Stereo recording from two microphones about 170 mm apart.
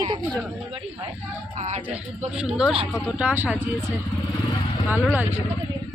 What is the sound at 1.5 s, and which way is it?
Speech, 45° right (ahead or behind).